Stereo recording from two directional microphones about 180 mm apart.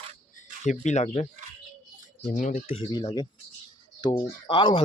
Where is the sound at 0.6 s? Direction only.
40° left (ahead or behind).